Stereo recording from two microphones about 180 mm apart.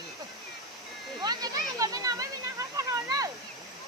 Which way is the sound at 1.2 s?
20° right (ahead or behind).